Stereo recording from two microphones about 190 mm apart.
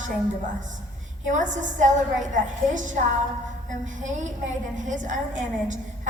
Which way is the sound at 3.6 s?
40° right (ahead or behind).